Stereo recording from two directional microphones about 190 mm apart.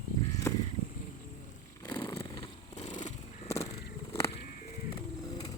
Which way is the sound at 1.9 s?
25° left (ahead or behind).